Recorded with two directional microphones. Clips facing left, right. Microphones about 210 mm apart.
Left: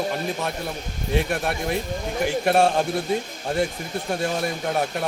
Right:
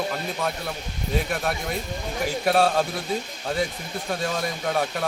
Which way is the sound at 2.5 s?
25° left (ahead or behind).